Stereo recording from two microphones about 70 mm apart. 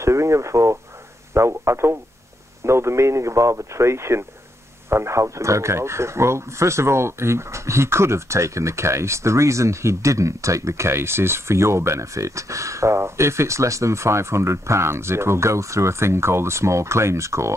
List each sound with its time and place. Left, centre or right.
0.0 s speech: right